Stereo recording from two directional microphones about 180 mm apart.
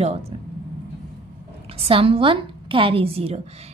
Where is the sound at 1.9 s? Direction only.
30° right (ahead or behind).